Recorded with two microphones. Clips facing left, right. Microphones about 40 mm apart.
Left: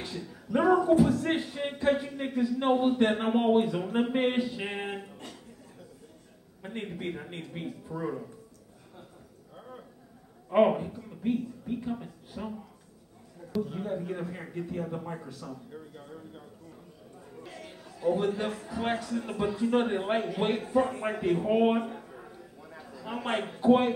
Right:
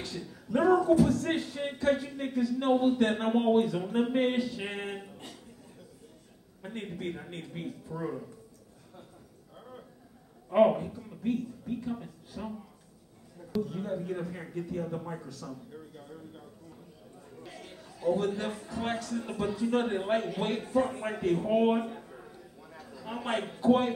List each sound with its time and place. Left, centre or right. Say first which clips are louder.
0.0 s a man's voice: left 1 dB; centre
6.6 s a man's voice: left 1 dB; centre
9.6 s a sound: left 2 dB; centre
10.5 s speech: even; centre
13.6 s a man's voice: left 1 dB; centre
17.4 s chatter: left 2 dB; centre
18.0 s a man's voice: left 1 dB; centre